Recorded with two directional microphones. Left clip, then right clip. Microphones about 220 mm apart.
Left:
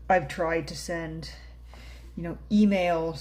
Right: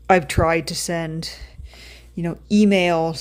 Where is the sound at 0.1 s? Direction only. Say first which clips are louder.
Right 8 dB; 45° right (ahead or behind).